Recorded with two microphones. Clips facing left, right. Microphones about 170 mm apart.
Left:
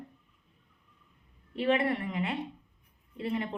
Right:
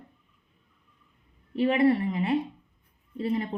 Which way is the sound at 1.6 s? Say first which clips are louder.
Right 6 dB; 30° right (ahead or behind).